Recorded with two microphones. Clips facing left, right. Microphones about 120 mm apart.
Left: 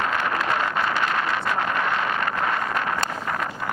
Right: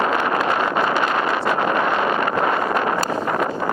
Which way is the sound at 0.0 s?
20° right (ahead or behind).